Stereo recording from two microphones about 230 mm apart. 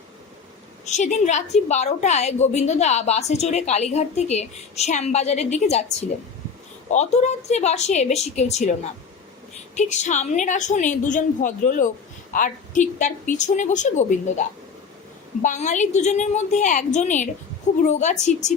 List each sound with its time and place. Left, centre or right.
0.9 s a woman's voice: left
15.4 s a woman's voice: left